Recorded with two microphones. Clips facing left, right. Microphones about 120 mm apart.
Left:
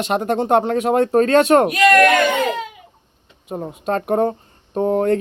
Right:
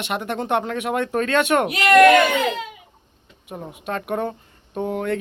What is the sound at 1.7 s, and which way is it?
Speech, 20° right (ahead or behind).